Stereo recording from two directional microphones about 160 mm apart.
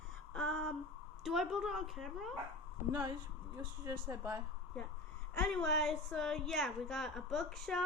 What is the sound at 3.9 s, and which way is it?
Speech, 20° right (ahead or behind).